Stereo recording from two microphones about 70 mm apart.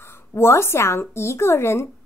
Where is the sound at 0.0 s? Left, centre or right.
Left.